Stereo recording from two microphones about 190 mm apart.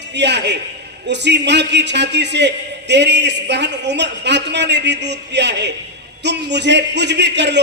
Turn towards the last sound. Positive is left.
turn(degrees=-65)  # may be behind; listen again after turning